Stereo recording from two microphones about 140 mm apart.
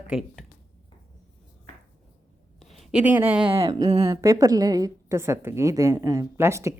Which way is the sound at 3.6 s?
25° right (ahead or behind).